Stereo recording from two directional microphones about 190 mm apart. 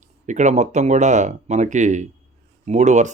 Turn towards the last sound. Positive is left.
turn(degrees=-40)  # may be behind; listen again after turning